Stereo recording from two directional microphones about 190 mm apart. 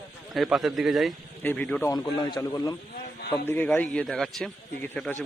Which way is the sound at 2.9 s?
50° left (ahead or behind).